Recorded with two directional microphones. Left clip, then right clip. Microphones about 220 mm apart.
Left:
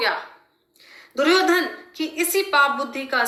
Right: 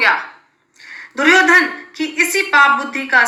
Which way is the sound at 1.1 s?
5° left (ahead or behind).